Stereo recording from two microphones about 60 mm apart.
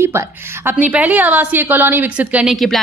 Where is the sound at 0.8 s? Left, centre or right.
Right.